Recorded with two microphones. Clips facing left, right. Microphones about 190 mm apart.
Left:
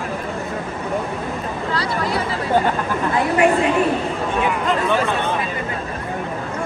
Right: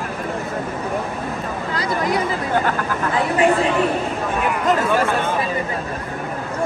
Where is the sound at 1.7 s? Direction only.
45° right (ahead or behind).